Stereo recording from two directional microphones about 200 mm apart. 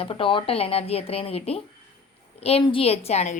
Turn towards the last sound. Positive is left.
turn(degrees=35)  # may be behind; listen again after turning